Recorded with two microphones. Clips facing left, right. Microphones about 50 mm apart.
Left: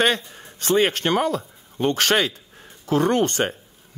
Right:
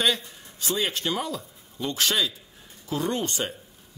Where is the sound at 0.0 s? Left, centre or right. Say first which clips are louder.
Left 5 dB; left.